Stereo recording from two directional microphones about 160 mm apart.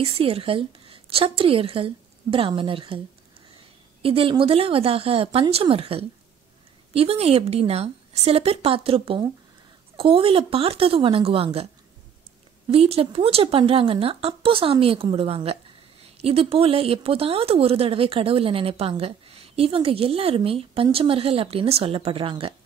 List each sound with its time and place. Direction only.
0.0 s speech: 35° right (ahead or behind)
4.0 s speech: 35° right (ahead or behind)
12.6 s speech: 40° right (ahead or behind)